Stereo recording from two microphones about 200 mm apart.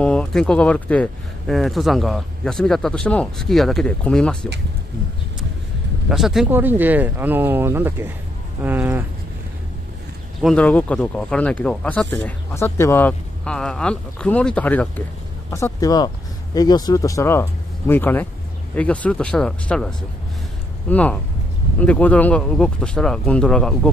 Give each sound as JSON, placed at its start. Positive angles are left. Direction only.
{"t": 0.0, "sound": "speech", "side_deg": 5}
{"t": 6.0, "sound": "speech", "side_deg": 0}
{"t": 10.4, "sound": "speech", "side_deg": 5}
{"t": 20.9, "sound": "speech", "side_deg": 5}